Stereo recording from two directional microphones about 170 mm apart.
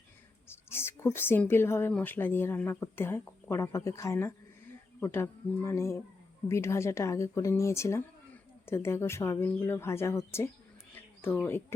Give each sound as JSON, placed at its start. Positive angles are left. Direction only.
{"t": 0.4, "sound": "speech", "side_deg": 15}